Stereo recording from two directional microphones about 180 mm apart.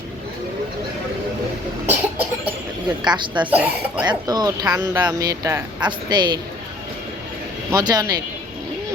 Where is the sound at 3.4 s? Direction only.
10° right (ahead or behind).